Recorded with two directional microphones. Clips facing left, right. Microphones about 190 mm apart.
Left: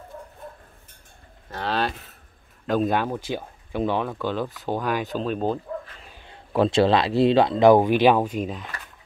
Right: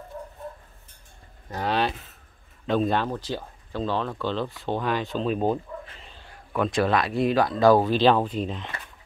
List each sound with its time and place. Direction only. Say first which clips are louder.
1.5 s speech: right 1 dB; 10° right (ahead or behind)
2.6 s speech: left 1 dB; 5° left (ahead or behind)
6.0 s a sound: left 1 dB; 15° left (ahead or behind)
6.3 s speech: left 5 dB; 30° left (ahead or behind); by 8.7 s 5° left (ahead or behind)